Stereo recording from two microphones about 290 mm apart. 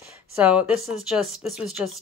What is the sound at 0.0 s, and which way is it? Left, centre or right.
Speech, centre.